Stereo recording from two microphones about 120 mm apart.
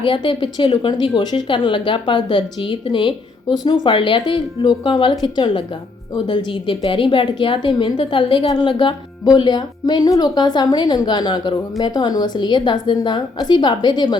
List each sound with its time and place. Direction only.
0.0 s a woman's voice: 45° left (ahead or behind)